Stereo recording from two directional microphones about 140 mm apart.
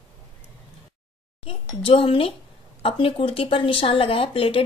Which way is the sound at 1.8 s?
40° left (ahead or behind).